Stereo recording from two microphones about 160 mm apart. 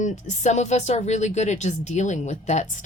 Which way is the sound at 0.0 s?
50° left (ahead or behind).